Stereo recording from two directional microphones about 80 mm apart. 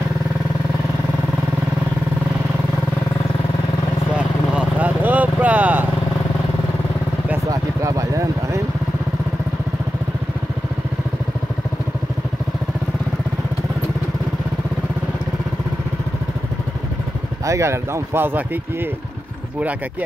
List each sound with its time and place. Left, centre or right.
4.2 s vehicle: centre
7.8 s a sound: right
17.5 s speech: right